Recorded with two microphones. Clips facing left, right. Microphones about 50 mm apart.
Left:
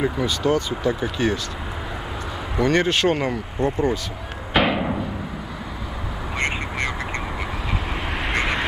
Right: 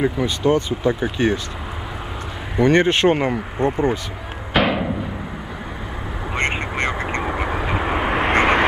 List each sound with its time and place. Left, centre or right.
0.0 s speech: centre
2.6 s speech: right
4.6 s a sound: centre
6.3 s vehicle: right